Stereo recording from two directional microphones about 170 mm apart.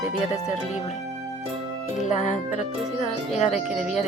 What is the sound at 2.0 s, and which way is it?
Speech, 45° left (ahead or behind).